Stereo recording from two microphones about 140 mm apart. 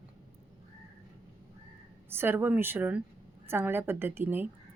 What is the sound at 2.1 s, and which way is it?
A woman's voice, 15° right (ahead or behind).